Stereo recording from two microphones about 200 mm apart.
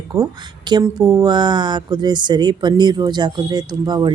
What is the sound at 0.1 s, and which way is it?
A woman's voice, 20° right (ahead or behind).